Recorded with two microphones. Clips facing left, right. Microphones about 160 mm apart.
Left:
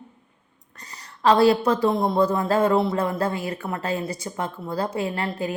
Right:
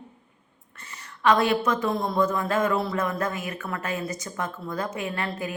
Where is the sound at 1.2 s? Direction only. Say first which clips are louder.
Left 4 dB; 35° left (ahead or behind).